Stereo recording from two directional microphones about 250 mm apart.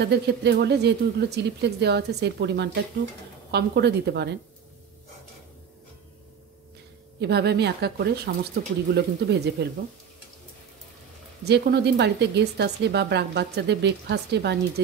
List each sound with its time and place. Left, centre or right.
0.0 s speech: right
7.2 s speech: right
11.4 s speech: right